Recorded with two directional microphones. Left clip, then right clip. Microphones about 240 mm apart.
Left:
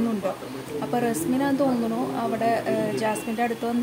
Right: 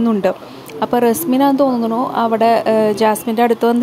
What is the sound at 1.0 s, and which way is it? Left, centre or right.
Speech, right.